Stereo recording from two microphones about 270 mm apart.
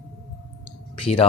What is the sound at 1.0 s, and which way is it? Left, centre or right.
Speech, left.